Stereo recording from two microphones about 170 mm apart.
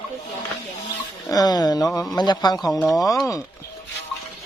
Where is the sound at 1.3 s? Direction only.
25° left (ahead or behind).